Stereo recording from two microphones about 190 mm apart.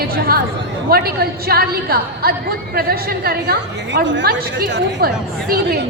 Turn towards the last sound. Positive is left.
turn(degrees=-55)  # may be behind; listen again after turning